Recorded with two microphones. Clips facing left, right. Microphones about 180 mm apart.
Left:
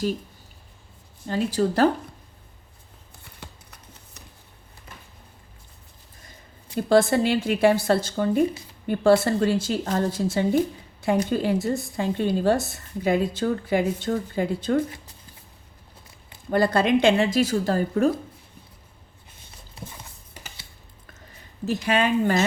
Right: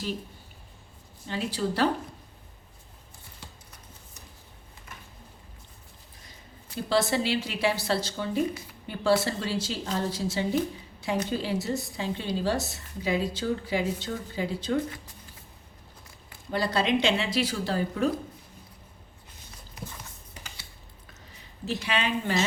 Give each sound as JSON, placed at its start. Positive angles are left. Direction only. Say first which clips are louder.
{"t": 1.3, "sound": "a woman's voice", "louder": "left 7 dB", "side_deg": 45}
{"t": 3.4, "sound": "a sound", "louder": "left 5 dB", "side_deg": 65}
{"t": 6.8, "sound": "a woman's voice", "louder": "left 7 dB", "side_deg": 50}
{"t": 16.5, "sound": "a woman's voice", "louder": "left 6 dB", "side_deg": 50}
{"t": 19.8, "sound": "clip-clop", "louder": "left 1 dB", "side_deg": 30}
{"t": 21.7, "sound": "a woman's voice", "louder": "left 7 dB", "side_deg": 45}